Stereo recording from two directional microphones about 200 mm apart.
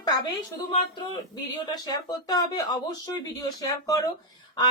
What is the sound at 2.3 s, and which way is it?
Speech, 20° left (ahead or behind).